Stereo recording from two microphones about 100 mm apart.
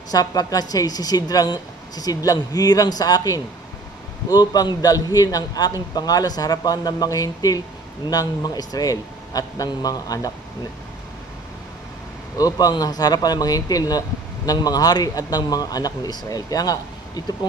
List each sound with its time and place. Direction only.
0.1 s speech: 40° left (ahead or behind)
12.4 s speech: 40° left (ahead or behind)